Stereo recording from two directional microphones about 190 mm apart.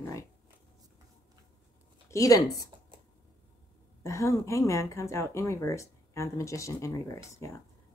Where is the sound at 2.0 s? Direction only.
15° left (ahead or behind).